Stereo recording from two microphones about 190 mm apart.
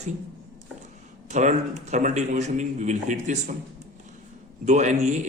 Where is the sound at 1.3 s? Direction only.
40° right (ahead or behind).